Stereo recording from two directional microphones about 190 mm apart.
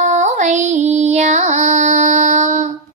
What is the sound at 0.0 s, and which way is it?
Music, 40° right (ahead or behind).